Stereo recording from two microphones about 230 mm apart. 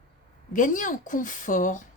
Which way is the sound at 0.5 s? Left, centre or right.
Left.